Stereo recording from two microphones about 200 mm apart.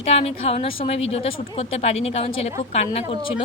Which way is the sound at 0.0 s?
30° left (ahead or behind).